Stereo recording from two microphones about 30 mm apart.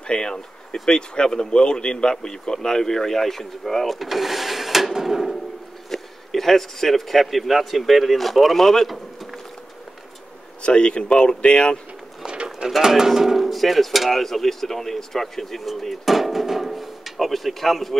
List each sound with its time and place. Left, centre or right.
0.0 s speech: left; by 4.9 s centre
5.0 s a sound: centre
5.9 s a man's voice: centre
8.8 s a sound: centre
10.6 s speech: left
12.6 s speech: centre
13.4 s speech: centre
15.7 s speech: centre